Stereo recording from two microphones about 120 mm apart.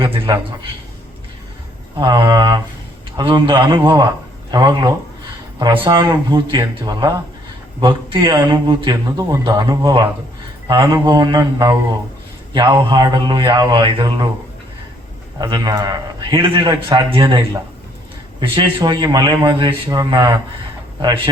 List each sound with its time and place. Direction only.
0.0 s a sound: 45° right (ahead or behind)
2.0 s a man's voice: 40° right (ahead or behind)
15.4 s a man's voice: 40° right (ahead or behind)